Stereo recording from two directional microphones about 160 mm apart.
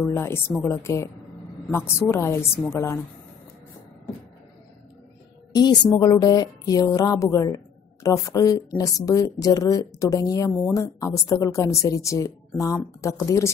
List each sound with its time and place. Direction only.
0.0 s a woman's voice: 15° left (ahead or behind)
5.5 s speech: 25° left (ahead or behind)